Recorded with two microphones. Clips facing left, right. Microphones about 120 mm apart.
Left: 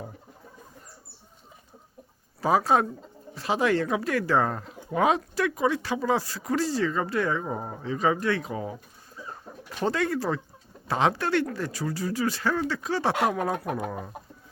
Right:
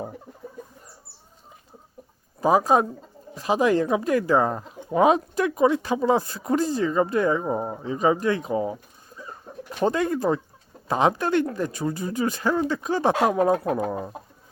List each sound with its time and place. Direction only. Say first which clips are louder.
2.4 s speech: right 3 dB; 15° right (ahead or behind)